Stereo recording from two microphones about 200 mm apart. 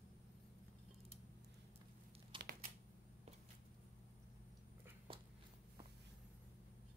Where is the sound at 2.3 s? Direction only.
25° right (ahead or behind).